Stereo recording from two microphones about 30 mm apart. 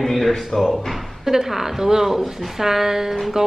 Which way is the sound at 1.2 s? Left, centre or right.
Centre.